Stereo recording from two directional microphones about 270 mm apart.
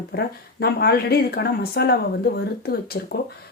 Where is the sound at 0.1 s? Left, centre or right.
Left.